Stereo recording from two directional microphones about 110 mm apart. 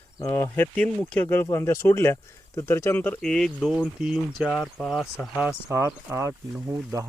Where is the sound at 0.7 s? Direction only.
10° left (ahead or behind).